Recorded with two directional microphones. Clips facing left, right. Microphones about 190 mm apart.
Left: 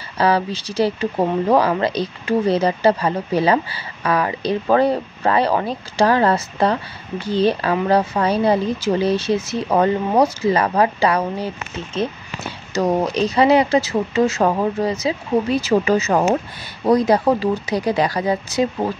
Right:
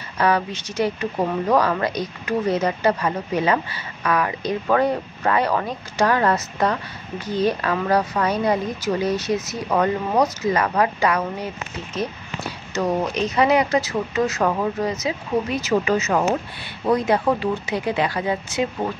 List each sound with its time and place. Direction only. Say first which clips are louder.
0.2 s speech: left 3 dB; 30° left (ahead or behind)